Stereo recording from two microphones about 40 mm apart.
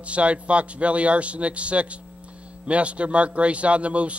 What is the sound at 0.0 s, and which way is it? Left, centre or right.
Speech, right.